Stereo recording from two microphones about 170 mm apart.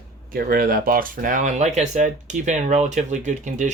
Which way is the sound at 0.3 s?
60° right (ahead or behind).